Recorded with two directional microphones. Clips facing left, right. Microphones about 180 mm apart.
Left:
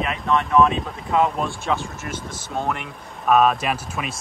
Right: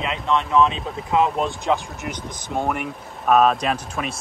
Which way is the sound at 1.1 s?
20° right (ahead or behind).